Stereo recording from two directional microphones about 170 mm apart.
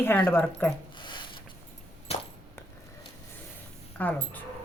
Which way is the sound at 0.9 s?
30° left (ahead or behind).